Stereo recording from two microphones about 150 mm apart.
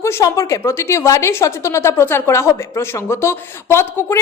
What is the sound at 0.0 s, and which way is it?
A woman's voice, 20° left (ahead or behind).